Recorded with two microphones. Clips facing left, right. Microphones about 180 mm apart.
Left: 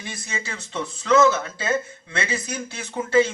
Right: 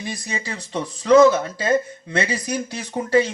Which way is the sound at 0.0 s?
40° right (ahead or behind).